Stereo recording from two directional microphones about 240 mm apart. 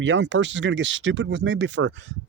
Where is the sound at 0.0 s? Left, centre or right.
Right.